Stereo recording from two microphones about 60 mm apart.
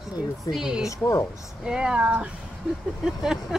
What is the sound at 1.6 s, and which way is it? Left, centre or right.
Speech, centre.